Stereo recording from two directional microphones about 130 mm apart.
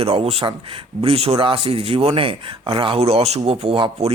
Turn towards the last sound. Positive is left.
turn(degrees=-45)  # may be behind; listen again after turning